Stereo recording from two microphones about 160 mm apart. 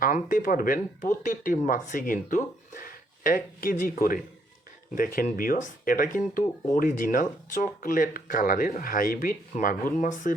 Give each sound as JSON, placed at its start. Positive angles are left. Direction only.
{"t": 0.0, "sound": "speech", "side_deg": 60}